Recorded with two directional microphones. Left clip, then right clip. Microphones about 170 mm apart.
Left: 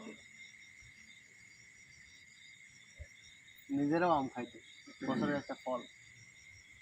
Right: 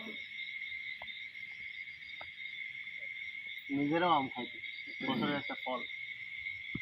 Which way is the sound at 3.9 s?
20° left (ahead or behind).